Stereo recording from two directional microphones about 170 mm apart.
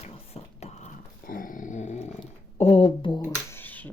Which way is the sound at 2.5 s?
35° left (ahead or behind).